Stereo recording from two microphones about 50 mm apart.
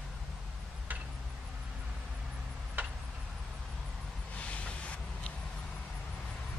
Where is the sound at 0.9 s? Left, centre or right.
Right.